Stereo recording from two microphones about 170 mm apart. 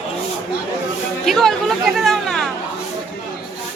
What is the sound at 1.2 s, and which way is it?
Chatter, centre (ahead or behind).